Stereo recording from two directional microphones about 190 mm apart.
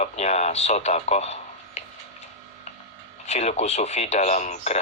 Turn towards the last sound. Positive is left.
turn(degrees=40)  # may be behind; listen again after turning